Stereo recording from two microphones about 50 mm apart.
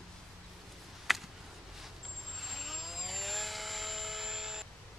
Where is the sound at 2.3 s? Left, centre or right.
Centre.